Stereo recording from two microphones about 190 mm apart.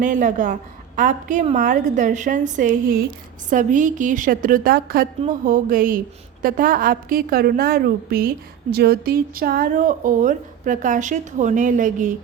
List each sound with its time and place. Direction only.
0.0 s a woman's voice: 40° right (ahead or behind)